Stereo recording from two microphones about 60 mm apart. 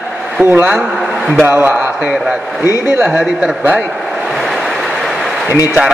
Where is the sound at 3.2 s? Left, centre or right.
Right.